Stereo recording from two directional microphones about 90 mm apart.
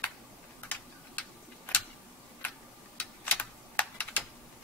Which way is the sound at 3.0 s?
20° left (ahead or behind).